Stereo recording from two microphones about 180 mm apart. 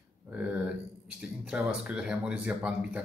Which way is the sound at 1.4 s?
5° right (ahead or behind).